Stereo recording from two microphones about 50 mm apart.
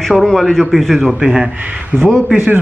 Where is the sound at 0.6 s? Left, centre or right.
Centre.